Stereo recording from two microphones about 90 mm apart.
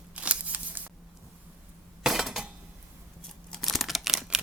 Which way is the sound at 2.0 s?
5° right (ahead or behind).